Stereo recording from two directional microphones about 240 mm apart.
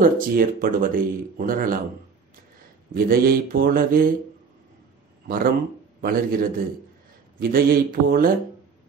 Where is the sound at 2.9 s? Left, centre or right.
Right.